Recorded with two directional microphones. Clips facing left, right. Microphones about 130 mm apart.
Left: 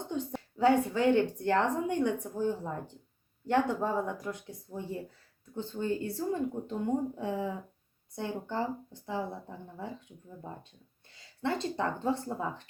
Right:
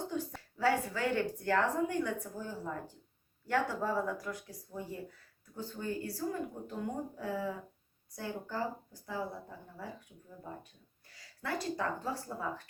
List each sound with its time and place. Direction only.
0.1 s speech: 20° left (ahead or behind)
11.1 s speech: 25° left (ahead or behind)